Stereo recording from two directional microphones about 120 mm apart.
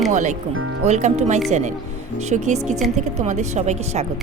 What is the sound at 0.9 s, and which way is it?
Speech, 70° right (ahead or behind).